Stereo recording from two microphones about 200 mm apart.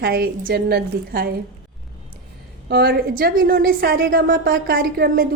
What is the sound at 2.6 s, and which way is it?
A woman's voice, 50° right (ahead or behind).